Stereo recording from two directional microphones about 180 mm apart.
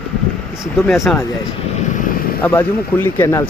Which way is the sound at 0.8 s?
Centre (ahead or behind).